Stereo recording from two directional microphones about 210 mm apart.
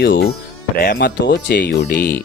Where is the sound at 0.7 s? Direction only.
45° left (ahead or behind).